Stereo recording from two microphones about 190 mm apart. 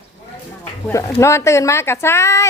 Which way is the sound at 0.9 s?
15° left (ahead or behind).